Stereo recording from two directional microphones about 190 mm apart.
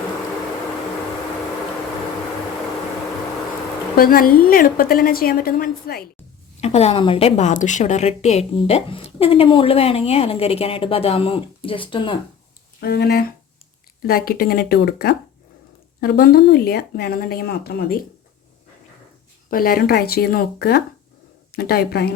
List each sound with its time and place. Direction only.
3.9 s a woman's voice: 50° left (ahead or behind)
6.6 s a woman's voice: 35° left (ahead or behind)
12.8 s a woman's voice: 55° left (ahead or behind)
19.5 s a woman's voice: 50° left (ahead or behind)